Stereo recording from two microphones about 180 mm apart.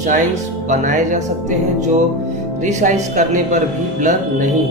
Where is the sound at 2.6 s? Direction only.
40° right (ahead or behind).